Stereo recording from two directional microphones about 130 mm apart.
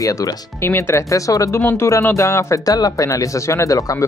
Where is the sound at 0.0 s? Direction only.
25° left (ahead or behind).